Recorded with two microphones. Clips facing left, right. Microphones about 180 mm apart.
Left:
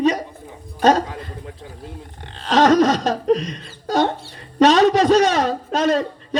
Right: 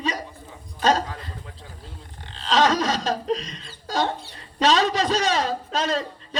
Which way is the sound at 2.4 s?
55° left (ahead or behind).